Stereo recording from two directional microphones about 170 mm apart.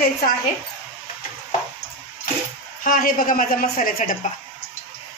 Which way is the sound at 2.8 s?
55° left (ahead or behind).